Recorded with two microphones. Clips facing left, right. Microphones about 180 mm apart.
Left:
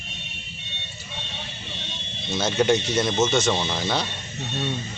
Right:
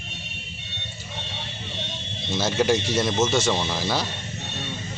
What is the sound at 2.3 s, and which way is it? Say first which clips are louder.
Speech: left 1 dB; 5° right (ahead or behind).